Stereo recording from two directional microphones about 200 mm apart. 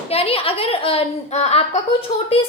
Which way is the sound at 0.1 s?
30° left (ahead or behind).